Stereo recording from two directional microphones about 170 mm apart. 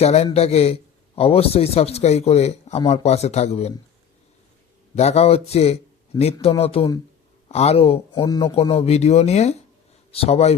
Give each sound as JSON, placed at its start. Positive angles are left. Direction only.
{"t": 0.0, "sound": "a man's voice", "side_deg": 40}
{"t": 4.9, "sound": "a man's voice", "side_deg": 40}